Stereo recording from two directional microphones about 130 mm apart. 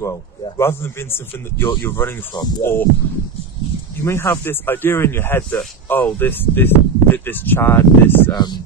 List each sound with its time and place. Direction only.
0.6 s a man's voice: 20° left (ahead or behind)
4.0 s speech: 20° left (ahead or behind)
8.3 s speech: 35° left (ahead or behind)